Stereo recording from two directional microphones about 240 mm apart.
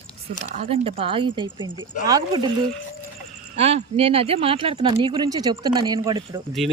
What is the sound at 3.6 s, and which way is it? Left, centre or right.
Speech, right.